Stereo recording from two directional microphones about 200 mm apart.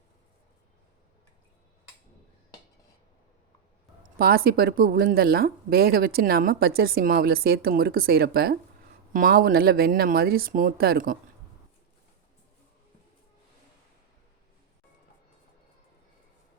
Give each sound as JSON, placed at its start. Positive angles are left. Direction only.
{"t": 4.2, "sound": "speech", "side_deg": -50}